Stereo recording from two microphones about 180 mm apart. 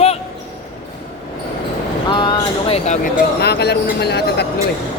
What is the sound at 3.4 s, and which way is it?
Speech, 65° left (ahead or behind).